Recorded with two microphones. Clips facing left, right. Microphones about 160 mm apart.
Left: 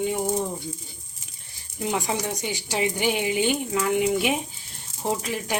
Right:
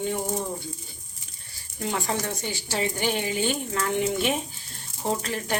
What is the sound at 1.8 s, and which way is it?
Speech, 15° left (ahead or behind).